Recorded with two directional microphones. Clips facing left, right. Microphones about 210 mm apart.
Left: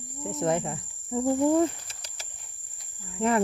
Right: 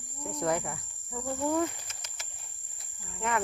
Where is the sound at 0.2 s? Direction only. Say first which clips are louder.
Left 4 dB; 25° left (ahead or behind).